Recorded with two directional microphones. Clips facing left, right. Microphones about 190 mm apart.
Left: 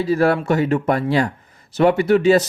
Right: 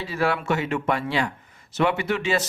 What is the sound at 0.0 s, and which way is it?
Speech, 40° left (ahead or behind).